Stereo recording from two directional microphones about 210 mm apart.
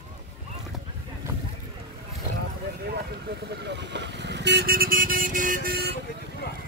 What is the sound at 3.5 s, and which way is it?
Speech, 55° right (ahead or behind).